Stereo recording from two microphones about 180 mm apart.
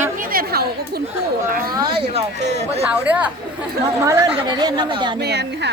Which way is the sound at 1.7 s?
30° right (ahead or behind).